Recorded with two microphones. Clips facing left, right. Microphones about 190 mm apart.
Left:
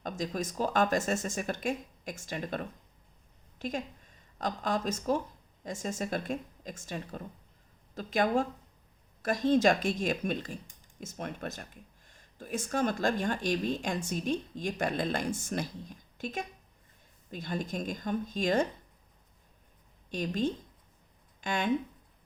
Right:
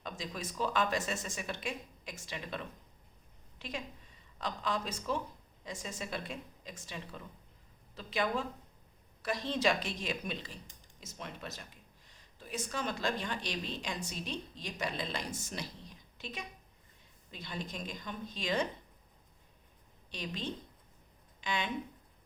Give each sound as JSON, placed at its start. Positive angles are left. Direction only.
{"t": 0.0, "sound": "a woman's voice", "side_deg": 45}
{"t": 20.1, "sound": "a woman's voice", "side_deg": 45}